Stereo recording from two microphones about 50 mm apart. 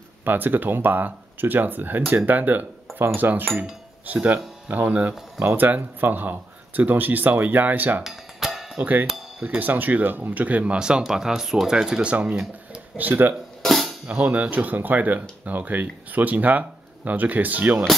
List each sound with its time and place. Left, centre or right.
0.2 s speech: right
8.0 s music: centre
8.8 s speech: right; by 12.0 s centre
12.0 s speech: right
13.6 s music: centre
14.0 s speech: right